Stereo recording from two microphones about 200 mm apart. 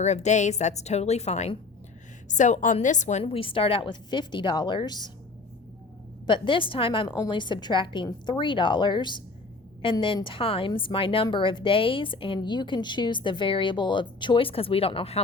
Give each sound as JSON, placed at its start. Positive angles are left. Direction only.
{"t": 0.0, "sound": "a woman's voice", "side_deg": 35}
{"t": 6.2, "sound": "a woman's voice", "side_deg": 25}